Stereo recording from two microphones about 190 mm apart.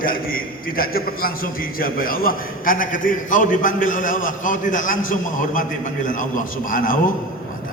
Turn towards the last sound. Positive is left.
turn(degrees=45)  # may be behind; listen again after turning